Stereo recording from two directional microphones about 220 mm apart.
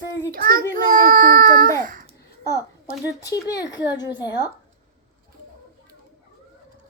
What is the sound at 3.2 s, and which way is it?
A woman's voice, 15° left (ahead or behind).